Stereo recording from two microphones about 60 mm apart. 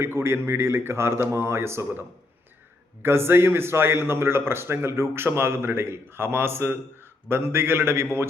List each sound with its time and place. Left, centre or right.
0.0 s a man's voice: right